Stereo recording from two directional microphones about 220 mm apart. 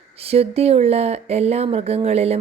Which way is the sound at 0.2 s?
25° right (ahead or behind).